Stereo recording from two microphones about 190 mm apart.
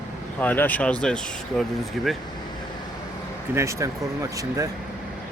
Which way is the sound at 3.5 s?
15° right (ahead or behind).